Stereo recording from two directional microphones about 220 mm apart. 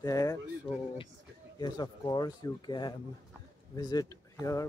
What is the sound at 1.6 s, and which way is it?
Speech, 20° left (ahead or behind).